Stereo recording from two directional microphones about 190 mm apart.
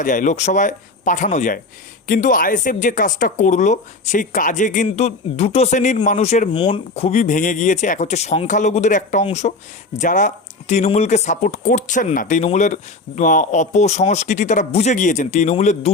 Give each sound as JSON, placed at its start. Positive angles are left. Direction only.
{"t": 0.0, "sound": "speech", "side_deg": 45}